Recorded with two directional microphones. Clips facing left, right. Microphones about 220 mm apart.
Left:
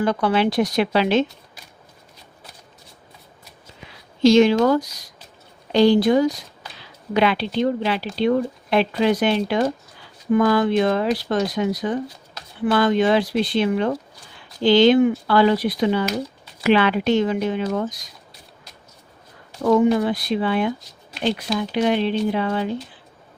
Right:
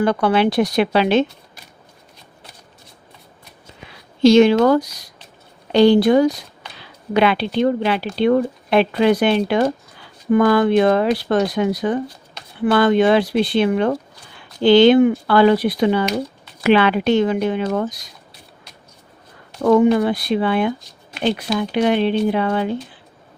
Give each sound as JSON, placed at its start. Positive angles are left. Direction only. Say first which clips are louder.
{"t": 0.0, "sound": "speech", "louder": "right 3 dB", "side_deg": -60}
{"t": 4.2, "sound": "speech", "louder": "right 3 dB", "side_deg": -65}
{"t": 19.6, "sound": "speech", "louder": "right 3 dB", "side_deg": -60}